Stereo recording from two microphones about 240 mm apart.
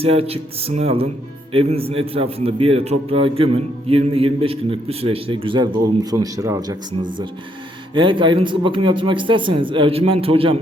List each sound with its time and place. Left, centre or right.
0.0 s a man's voice: right